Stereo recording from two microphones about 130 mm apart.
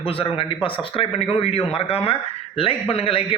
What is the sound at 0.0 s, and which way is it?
Speech, 45° left (ahead or behind).